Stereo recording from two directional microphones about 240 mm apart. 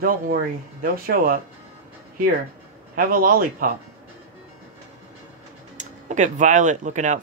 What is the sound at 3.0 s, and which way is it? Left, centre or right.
Speech, right.